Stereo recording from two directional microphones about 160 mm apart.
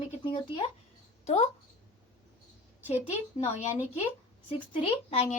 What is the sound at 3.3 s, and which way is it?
A woman's voice, 45° left (ahead or behind).